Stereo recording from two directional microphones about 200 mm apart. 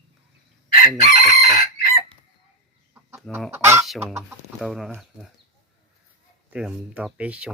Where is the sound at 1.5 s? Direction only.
50° left (ahead or behind).